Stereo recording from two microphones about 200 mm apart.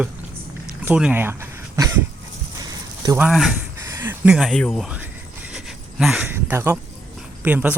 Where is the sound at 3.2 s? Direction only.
Centre (ahead or behind).